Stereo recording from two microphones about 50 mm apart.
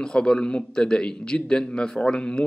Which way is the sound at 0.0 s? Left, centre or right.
Centre.